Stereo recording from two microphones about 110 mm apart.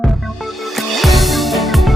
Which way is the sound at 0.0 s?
Centre (ahead or behind).